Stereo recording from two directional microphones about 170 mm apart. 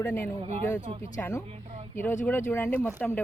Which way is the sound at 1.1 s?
20° left (ahead or behind).